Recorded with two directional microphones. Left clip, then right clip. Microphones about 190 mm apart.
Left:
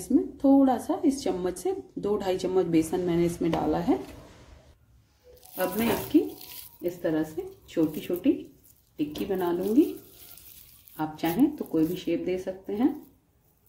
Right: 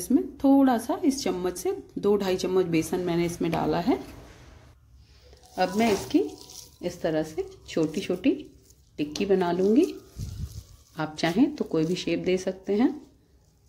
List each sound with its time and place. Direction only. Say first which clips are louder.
0.1 s a woman's voice: even; 45° right (ahead or behind)
6.1 s a woman's voice: left 1 dB; 35° right (ahead or behind)
11.0 s speech: right 1 dB; 45° right (ahead or behind)